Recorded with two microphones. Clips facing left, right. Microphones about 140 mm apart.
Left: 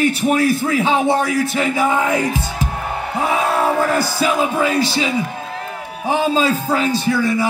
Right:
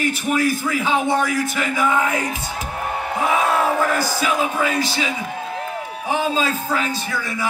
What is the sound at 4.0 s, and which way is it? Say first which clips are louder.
A man's voice: left 3 dB; 30° left (ahead or behind).